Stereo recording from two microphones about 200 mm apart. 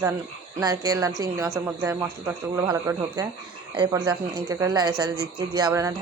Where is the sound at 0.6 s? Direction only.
20° right (ahead or behind).